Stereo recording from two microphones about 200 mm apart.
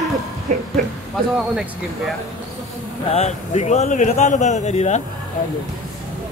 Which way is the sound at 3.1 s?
35° left (ahead or behind).